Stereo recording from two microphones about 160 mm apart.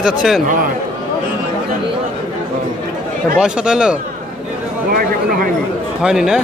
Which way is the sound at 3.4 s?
5° right (ahead or behind).